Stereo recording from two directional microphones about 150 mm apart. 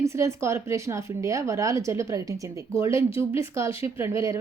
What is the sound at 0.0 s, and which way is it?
A woman's voice, 20° right (ahead or behind).